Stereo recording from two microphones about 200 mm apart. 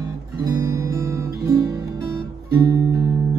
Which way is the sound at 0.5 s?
15° right (ahead or behind).